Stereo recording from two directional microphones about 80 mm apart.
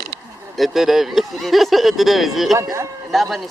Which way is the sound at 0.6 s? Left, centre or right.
Centre.